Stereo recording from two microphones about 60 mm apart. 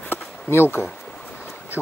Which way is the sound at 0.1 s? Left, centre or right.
Left.